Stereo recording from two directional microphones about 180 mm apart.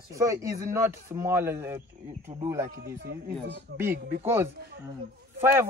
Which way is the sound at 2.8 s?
65° right (ahead or behind).